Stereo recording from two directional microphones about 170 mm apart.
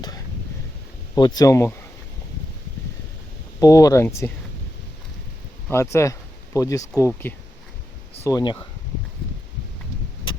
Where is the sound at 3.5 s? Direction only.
20° left (ahead or behind).